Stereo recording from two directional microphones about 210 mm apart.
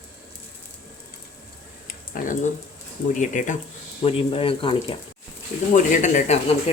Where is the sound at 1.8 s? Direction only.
40° left (ahead or behind).